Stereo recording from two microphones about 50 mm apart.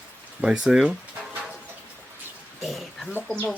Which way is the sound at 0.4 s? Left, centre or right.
Centre.